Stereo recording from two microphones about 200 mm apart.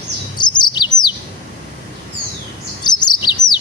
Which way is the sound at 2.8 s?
20° left (ahead or behind).